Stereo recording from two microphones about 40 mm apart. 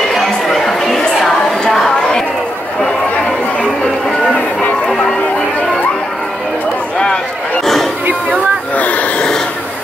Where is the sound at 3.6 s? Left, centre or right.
Centre.